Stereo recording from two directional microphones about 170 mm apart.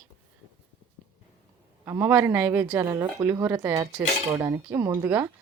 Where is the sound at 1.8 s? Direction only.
15° right (ahead or behind).